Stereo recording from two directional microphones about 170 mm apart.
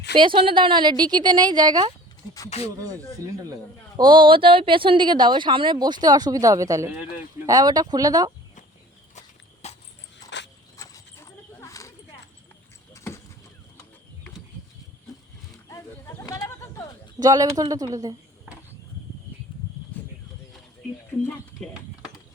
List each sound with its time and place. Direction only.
0.2 s speech: 30° right (ahead or behind)
9.1 s a sound: 40° left (ahead or behind)
10.2 s dog: 90° left
10.8 s horse: 20° left (ahead or behind)
12.9 s clip-clop: 15° left (ahead or behind)
15.7 s a sound: 20° left (ahead or behind)
17.2 s speech: 20° right (ahead or behind)
21.2 s speech: 5° left (ahead or behind)